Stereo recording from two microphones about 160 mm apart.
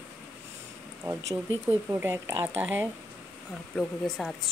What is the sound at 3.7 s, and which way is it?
Speech, 5° left (ahead or behind).